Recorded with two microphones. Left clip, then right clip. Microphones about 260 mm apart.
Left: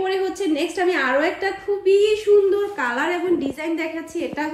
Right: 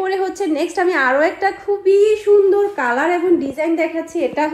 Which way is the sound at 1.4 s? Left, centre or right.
Centre.